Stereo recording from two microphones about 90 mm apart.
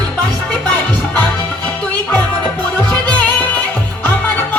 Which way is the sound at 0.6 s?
20° left (ahead or behind).